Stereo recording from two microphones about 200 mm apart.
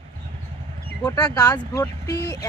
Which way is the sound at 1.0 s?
20° left (ahead or behind).